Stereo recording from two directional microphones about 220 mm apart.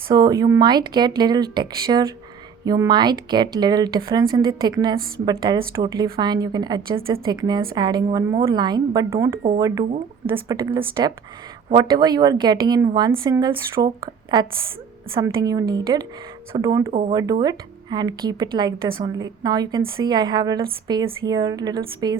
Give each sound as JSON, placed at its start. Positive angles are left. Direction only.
{"t": 0.1, "sound": "a woman's voice", "side_deg": -15}